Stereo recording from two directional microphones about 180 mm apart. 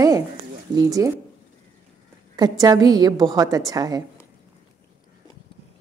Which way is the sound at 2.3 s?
20° right (ahead or behind).